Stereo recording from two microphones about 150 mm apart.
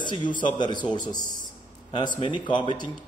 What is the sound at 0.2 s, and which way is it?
Speech, 60° left (ahead or behind).